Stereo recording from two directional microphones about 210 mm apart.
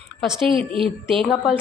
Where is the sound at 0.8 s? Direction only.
Centre (ahead or behind).